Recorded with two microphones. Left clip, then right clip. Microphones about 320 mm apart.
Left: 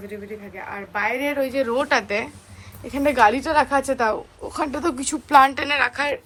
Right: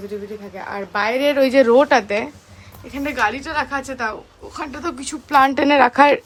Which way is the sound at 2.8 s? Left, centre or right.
Centre.